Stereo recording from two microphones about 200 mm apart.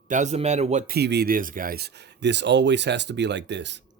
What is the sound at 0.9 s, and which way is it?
Speech, 55° right (ahead or behind).